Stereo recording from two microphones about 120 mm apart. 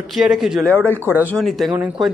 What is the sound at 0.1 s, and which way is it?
Speech, 5° right (ahead or behind).